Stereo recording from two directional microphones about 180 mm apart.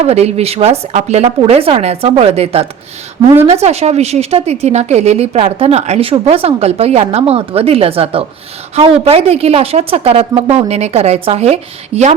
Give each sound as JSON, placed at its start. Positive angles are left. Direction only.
{"t": 0.0, "sound": "a woman's voice", "side_deg": -35}